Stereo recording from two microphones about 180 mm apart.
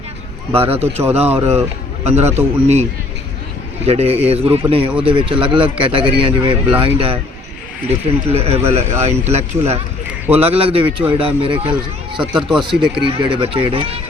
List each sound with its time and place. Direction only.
0.5 s speech: 30° right (ahead or behind)
3.8 s speech: 35° right (ahead or behind)
8.3 s speech: 35° right (ahead or behind)
12.2 s speech: 5° right (ahead or behind)
12.8 s speech: 25° right (ahead or behind)